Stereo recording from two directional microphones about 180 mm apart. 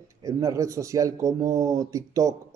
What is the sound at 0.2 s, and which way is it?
Speech, 20° right (ahead or behind).